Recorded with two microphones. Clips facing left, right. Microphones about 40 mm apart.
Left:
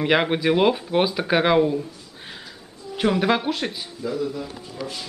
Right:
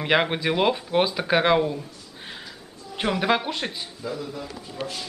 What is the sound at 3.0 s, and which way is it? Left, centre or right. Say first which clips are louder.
A woman's voice: left 2 dB; centre.